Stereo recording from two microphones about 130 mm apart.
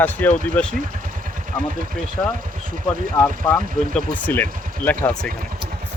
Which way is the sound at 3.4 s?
15° left (ahead or behind).